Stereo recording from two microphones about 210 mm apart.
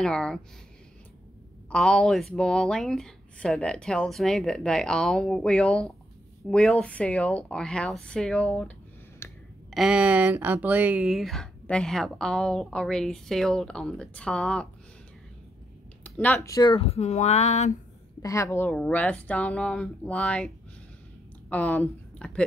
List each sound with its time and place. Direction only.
0.0 s speech: 5° left (ahead or behind)
1.7 s speech: 5° left (ahead or behind)
9.2 s a sound: 10° left (ahead or behind)
9.7 s speech: 5° right (ahead or behind)
16.0 s speech: 5° left (ahead or behind); by 17.7 s 35° left (ahead or behind)
18.2 s a woman's voice: 15° left (ahead or behind)